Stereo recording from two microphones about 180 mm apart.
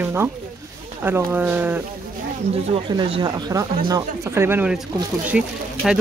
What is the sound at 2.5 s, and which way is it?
Speech, 30° right (ahead or behind).